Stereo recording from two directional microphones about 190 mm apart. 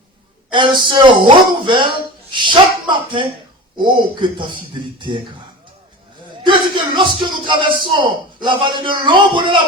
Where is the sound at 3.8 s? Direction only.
25° right (ahead or behind).